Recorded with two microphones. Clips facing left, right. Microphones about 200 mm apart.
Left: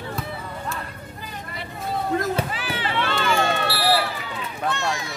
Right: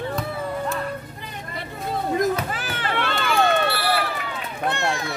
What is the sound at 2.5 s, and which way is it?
Children playing, 45° right (ahead or behind).